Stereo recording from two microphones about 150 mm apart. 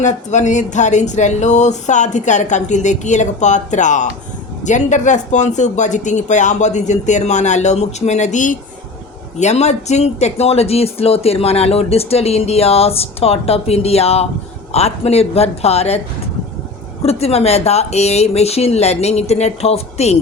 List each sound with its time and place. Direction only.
0.0 s speech: 50° left (ahead or behind)
17.0 s speech: 45° left (ahead or behind)